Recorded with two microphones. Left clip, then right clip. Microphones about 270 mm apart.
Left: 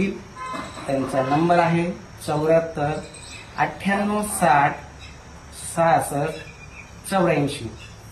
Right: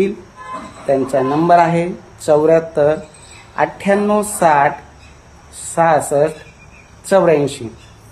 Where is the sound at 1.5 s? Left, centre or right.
Centre.